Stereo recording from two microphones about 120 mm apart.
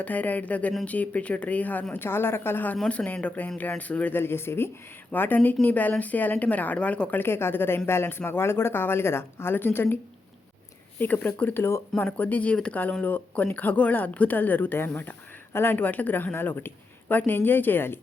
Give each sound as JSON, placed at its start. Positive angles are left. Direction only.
{"t": 0.0, "sound": "speech", "side_deg": 15}
{"t": 11.0, "sound": "speech", "side_deg": 15}